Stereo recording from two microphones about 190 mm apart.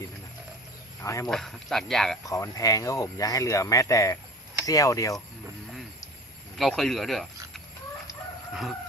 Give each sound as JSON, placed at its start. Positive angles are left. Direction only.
{"t": 1.0, "sound": "speech", "side_deg": 15}
{"t": 1.3, "sound": "speech", "side_deg": 0}
{"t": 2.2, "sound": "speech", "side_deg": 15}
{"t": 6.6, "sound": "speech", "side_deg": 0}